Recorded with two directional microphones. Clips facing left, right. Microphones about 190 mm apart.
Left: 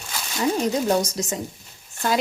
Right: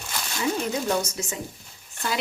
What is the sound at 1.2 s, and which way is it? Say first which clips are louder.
Speech: left 5 dB; 35° left (ahead or behind).